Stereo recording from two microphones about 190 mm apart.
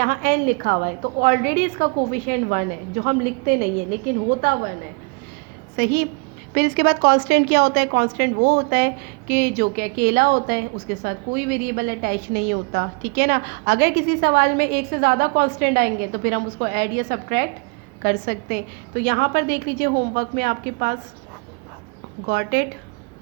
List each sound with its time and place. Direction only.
0.0 s a woman's voice: 50° right (ahead or behind)
5.7 s a woman's voice: 55° right (ahead or behind)
22.3 s a woman's voice: 55° right (ahead or behind)